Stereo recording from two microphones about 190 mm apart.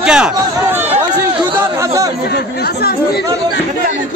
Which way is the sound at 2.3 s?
55° left (ahead or behind).